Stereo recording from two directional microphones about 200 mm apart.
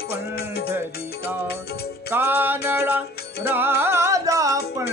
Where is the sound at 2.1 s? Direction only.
10° right (ahead or behind).